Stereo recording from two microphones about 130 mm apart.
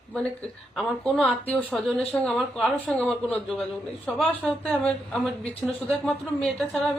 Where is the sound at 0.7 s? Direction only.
Centre (ahead or behind).